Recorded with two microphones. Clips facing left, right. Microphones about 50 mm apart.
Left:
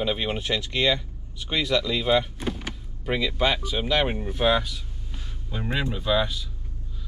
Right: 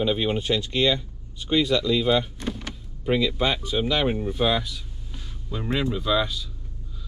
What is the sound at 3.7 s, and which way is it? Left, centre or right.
Speech, left.